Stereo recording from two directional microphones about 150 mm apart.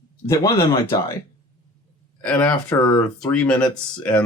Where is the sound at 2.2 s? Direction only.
10° left (ahead or behind).